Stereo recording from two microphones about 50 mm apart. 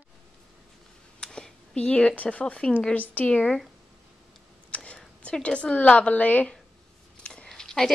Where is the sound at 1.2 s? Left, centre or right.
Centre.